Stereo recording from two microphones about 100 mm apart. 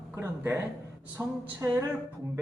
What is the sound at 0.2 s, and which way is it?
A man's voice, 25° right (ahead or behind).